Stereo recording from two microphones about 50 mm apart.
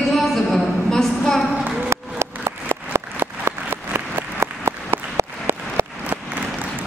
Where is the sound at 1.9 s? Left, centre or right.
Right.